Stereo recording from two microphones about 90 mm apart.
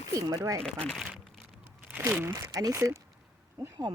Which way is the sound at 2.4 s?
45° right (ahead or behind).